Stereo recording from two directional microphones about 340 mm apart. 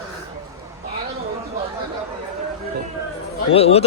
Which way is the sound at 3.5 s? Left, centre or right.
Centre.